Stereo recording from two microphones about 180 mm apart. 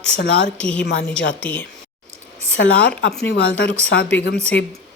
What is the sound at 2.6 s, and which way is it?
Speech, 75° left (ahead or behind).